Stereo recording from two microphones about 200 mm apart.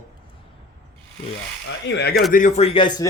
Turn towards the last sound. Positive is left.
turn(degrees=25)  # may be behind; listen again after turning